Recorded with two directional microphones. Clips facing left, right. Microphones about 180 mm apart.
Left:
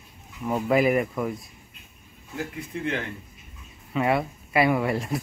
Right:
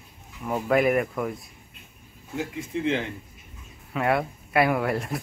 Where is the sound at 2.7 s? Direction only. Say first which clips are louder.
Right 4 dB; 25° right (ahead or behind).